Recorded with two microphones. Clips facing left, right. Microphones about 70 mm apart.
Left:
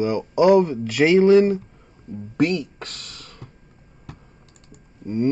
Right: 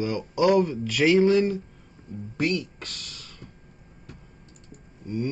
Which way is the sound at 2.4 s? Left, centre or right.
Left.